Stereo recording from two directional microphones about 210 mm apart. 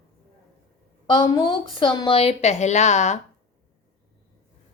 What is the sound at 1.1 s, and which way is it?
Speech, 20° left (ahead or behind).